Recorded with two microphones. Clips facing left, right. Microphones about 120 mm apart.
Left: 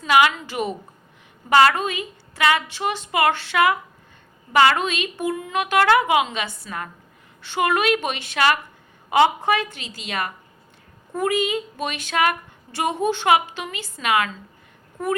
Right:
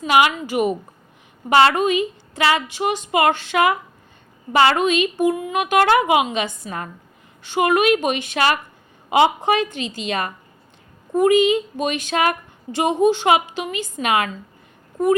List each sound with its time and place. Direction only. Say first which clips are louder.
0.0 s speech: right 1 dB; 20° right (ahead or behind)
1.5 s a woman's voice: right 2 dB; 25° right (ahead or behind)
4.8 s a woman's voice: right 7 dB; 15° right (ahead or behind)
6.7 s a woman's voice: right 2 dB; 30° right (ahead or behind)
7.5 s a woman's voice: right 4 dB; 15° right (ahead or behind)